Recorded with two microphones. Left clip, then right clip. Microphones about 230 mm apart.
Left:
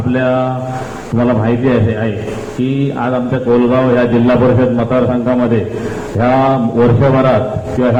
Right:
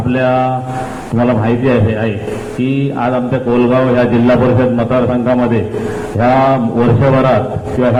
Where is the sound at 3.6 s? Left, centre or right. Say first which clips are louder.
Right 4 dB; right.